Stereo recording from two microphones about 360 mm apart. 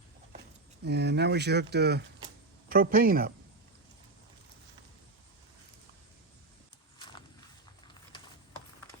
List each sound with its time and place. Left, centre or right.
0.9 s speech: right